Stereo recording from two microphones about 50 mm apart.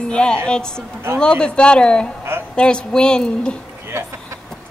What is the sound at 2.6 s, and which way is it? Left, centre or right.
Speech, centre.